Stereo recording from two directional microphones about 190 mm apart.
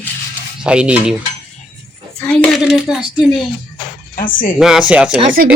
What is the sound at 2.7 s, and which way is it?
Speech, 5° right (ahead or behind).